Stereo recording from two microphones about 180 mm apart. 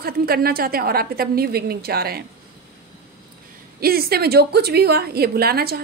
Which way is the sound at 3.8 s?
55° right (ahead or behind).